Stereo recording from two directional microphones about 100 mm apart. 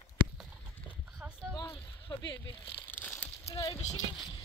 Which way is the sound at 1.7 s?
50° left (ahead or behind).